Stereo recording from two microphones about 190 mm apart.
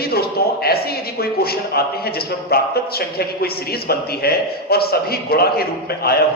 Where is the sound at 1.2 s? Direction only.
55° left (ahead or behind).